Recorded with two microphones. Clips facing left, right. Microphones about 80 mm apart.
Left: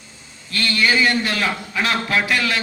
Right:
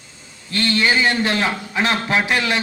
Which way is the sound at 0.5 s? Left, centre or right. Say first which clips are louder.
Right 1 dB; right.